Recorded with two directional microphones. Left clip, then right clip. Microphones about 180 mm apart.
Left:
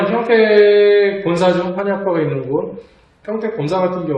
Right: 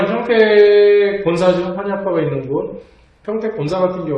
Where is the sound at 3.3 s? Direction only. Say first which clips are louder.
Even; 15° left (ahead or behind).